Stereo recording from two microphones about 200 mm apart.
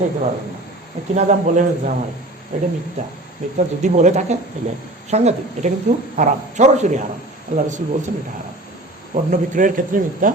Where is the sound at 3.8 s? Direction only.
35° right (ahead or behind).